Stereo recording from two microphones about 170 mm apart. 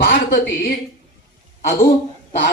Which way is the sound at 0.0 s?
70° left (ahead or behind).